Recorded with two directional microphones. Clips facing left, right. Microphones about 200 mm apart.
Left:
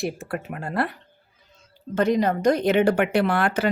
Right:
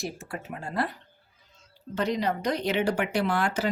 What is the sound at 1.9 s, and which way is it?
A woman's voice, 50° left (ahead or behind).